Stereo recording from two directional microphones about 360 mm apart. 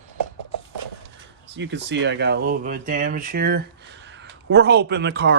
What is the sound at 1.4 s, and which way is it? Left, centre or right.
Speech, right.